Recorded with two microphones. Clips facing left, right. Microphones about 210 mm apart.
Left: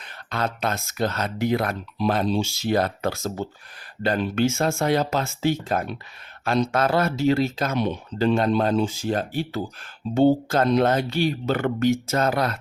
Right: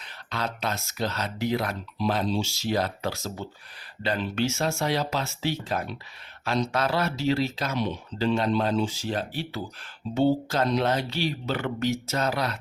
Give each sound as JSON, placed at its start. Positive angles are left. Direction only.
{"t": 0.0, "sound": "speech", "side_deg": 50}